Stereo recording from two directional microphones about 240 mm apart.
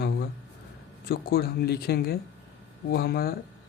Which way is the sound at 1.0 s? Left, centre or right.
Left.